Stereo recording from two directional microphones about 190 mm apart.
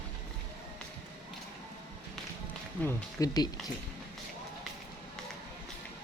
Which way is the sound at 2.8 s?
20° left (ahead or behind).